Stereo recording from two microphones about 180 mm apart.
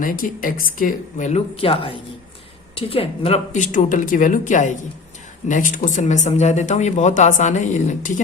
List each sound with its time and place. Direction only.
0.0 s speech: 50° left (ahead or behind)